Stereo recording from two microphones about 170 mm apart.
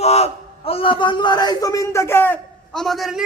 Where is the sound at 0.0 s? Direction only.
40° left (ahead or behind).